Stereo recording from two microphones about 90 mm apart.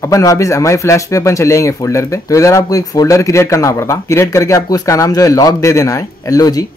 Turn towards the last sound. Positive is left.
turn(degrees=45)  # may be behind; listen again after turning